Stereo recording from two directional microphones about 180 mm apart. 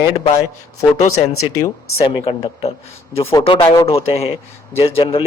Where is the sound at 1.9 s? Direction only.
30° left (ahead or behind).